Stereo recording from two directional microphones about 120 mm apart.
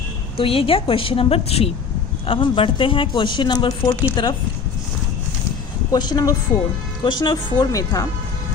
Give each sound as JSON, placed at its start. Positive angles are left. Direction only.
{"t": 0.3, "sound": "a woman's voice", "side_deg": 50}
{"t": 5.9, "sound": "speech", "side_deg": 35}